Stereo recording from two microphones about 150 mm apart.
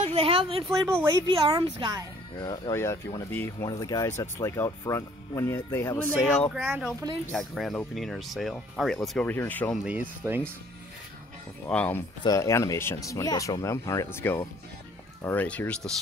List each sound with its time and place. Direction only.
0.0 s speech: 40° right (ahead or behind)
2.3 s speech: 30° left (ahead or behind)
2.7 s speech: 20° left (ahead or behind)
6.5 s speech: 5° right (ahead or behind); by 9.8 s 10° left (ahead or behind)
9.8 s speech: 15° right (ahead or behind)
11.6 s speech: 10° left (ahead or behind)
12.2 s speech: 25° left (ahead or behind)